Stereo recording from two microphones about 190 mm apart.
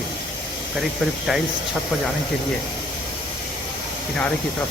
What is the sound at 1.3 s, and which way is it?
Speech, centre (ahead or behind).